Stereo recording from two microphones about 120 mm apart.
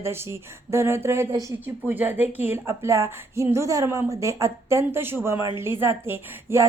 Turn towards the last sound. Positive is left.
turn(degrees=-20)  # may be behind; listen again after turning